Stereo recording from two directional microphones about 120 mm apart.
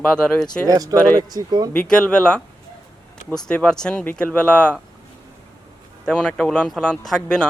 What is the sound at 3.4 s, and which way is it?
Speech, 10° left (ahead or behind).